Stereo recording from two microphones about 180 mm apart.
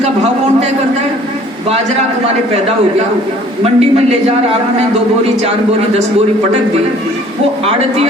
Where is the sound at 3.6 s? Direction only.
35° right (ahead or behind).